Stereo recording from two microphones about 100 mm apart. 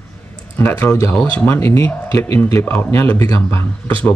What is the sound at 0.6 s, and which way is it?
A man's voice, 25° left (ahead or behind).